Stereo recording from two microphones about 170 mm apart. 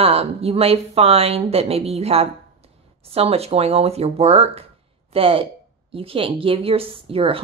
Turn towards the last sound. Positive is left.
turn(degrees=-35)  # may be behind; listen again after turning